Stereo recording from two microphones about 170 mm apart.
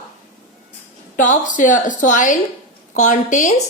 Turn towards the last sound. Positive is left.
turn(degrees=50)  # may be behind; listen again after turning